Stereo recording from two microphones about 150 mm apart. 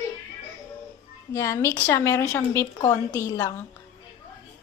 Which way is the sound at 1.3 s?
20° left (ahead or behind).